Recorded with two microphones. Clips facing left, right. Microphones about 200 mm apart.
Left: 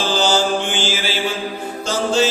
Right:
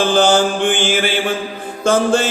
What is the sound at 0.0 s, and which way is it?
Mantra, 55° right (ahead or behind).